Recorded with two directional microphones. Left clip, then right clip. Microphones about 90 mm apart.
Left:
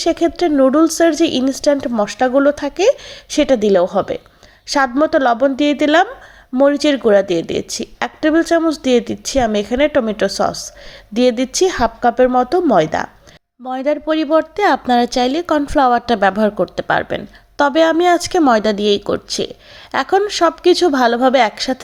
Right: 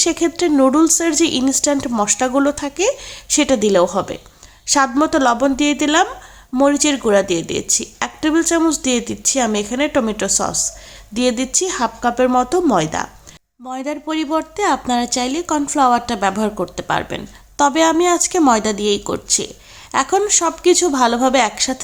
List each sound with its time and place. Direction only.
0.0 s speech: 20° left (ahead or behind)
2.6 s a woman's voice: 30° left (ahead or behind)
13.7 s a woman's voice: 40° left (ahead or behind)